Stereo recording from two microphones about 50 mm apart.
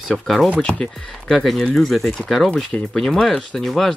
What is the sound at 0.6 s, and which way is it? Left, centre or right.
Speech, centre.